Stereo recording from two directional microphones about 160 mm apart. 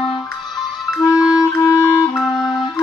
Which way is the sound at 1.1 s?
5° right (ahead or behind).